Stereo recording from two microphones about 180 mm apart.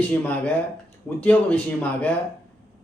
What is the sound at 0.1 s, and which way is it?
A man's voice, 10° left (ahead or behind).